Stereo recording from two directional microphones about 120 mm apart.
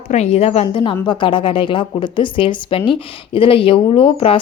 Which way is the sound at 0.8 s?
40° left (ahead or behind).